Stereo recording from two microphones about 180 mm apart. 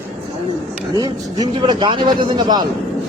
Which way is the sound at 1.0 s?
25° right (ahead or behind).